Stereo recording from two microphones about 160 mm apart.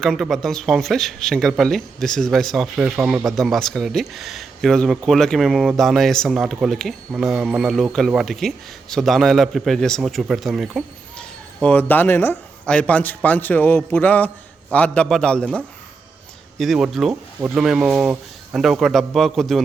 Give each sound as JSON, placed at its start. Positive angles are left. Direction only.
{"t": 0.0, "sound": "a man's voice", "side_deg": 0}